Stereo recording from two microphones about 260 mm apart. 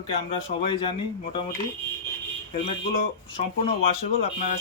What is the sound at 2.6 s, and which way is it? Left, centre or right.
Speech, left.